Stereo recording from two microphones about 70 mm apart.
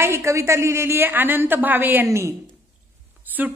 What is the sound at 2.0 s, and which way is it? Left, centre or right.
Speech, right.